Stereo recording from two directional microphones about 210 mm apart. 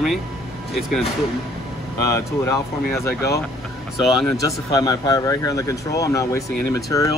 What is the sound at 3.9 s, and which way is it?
Speech, centre (ahead or behind).